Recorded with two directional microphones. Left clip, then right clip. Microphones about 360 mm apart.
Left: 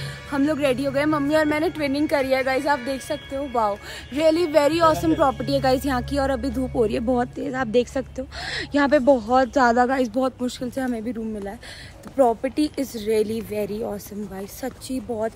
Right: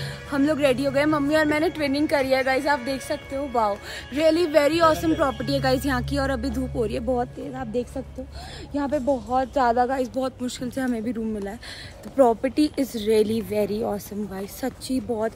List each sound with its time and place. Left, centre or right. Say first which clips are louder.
0.0 s speech: even; centre
6.7 s speech: left 4 dB; centre
10.6 s speech: right 2 dB; centre